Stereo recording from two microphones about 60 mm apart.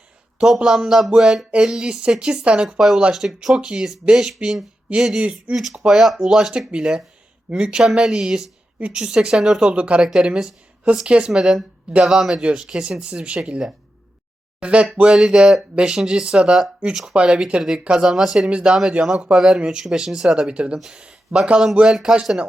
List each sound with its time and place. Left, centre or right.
0.3 s speech: centre
2.6 s speech: centre
5.5 s speech: centre
15.1 s speech: centre
20.7 s speech: centre
21.3 s a man's voice: right
21.8 s speech: centre